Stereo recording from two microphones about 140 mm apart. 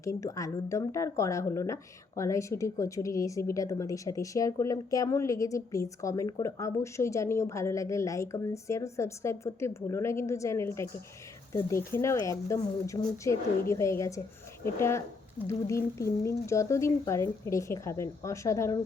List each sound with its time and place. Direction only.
0.0 s speech: 25° left (ahead or behind)